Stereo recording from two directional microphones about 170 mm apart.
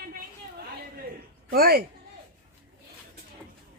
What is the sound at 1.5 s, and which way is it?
Speech, 60° right (ahead or behind).